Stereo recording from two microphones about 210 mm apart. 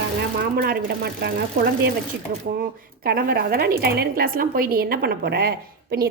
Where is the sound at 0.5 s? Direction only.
45° right (ahead or behind).